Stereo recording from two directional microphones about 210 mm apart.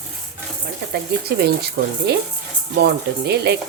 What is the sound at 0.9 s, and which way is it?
Speech, 50° right (ahead or behind).